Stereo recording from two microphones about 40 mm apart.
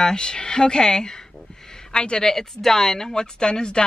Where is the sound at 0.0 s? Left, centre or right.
Centre.